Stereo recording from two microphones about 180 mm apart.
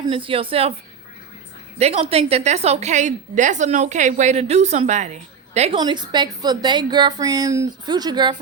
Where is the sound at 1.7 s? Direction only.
35° right (ahead or behind).